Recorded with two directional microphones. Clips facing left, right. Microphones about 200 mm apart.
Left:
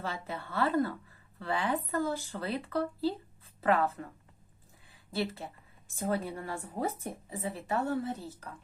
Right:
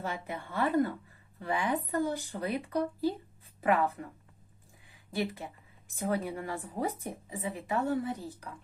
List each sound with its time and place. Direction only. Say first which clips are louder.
0.0 s a woman's voice: right 1 dB; 15° right (ahead or behind)
4.9 s a sound: even; 15° right (ahead or behind)
6.0 s a woman's voice: right 1 dB; 15° right (ahead or behind)